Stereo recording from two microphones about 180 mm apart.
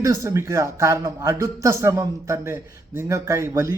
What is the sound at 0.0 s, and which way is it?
A man's voice, 15° right (ahead or behind).